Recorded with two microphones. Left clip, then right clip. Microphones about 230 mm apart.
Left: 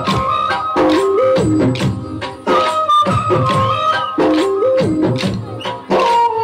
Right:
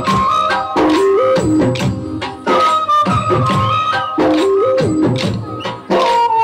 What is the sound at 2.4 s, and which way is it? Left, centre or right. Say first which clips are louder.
Music: right 1 dB; right.